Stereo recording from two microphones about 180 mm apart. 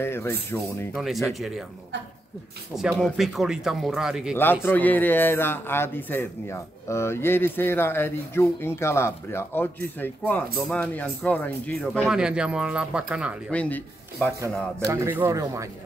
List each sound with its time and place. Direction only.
0.0 s speech: 15° left (ahead or behind)
0.9 s speech: centre (ahead or behind)
2.7 s speech: 5° right (ahead or behind)
4.6 s speech: 10° left (ahead or behind); by 13.4 s 5° right (ahead or behind)
13.5 s speech: 10° left (ahead or behind)
14.9 s speech: 10° right (ahead or behind)